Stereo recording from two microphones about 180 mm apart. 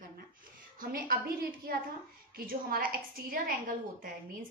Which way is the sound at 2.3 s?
55° right (ahead or behind).